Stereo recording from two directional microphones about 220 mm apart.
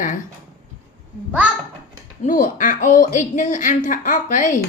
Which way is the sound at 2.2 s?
35° left (ahead or behind).